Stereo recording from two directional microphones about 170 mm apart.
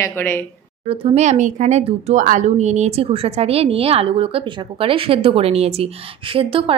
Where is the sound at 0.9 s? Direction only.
35° right (ahead or behind).